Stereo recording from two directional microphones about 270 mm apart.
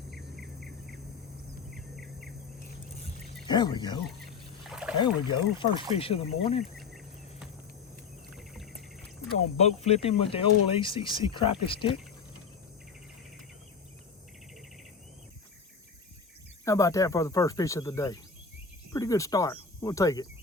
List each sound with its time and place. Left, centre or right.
0.2 s cricket: right
3.4 s speech: centre
4.7 s rowboat: centre
4.9 s speech: centre
6.7 s a sound: centre
8.4 s cricket: centre
9.6 s speech: left
16.6 s speech: centre